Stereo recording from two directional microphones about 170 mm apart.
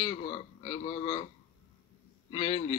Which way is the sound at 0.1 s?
45° left (ahead or behind).